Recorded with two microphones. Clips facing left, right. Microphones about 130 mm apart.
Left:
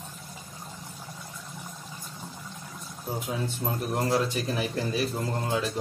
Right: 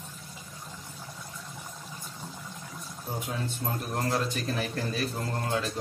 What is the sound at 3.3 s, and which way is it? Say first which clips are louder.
Speech: left 2 dB; 10° left (ahead or behind).